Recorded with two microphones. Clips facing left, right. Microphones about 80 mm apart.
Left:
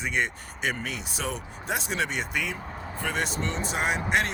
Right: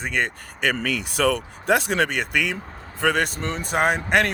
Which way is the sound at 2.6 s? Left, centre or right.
Centre.